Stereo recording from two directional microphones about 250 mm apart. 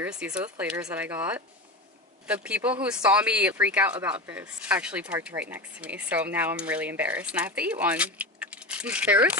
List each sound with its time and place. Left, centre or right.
0.0 s speech: centre